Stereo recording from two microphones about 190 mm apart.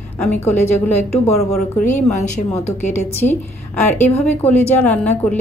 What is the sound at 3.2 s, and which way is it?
A woman's voice, 10° left (ahead or behind).